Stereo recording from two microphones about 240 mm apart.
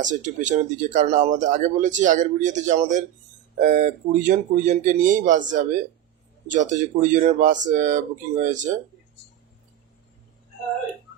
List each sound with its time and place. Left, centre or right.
0.0 s speech: right